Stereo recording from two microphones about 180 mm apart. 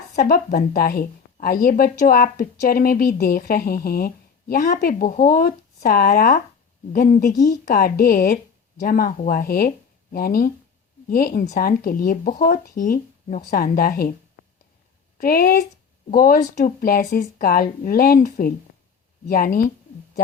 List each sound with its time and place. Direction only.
0.2 s a woman's voice: 50° left (ahead or behind)
7.3 s speech: 20° left (ahead or behind)
7.7 s a woman's voice: 55° left (ahead or behind)
15.2 s a woman's voice: 55° left (ahead or behind)